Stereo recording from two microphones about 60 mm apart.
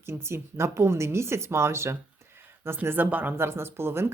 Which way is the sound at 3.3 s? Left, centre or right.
Right.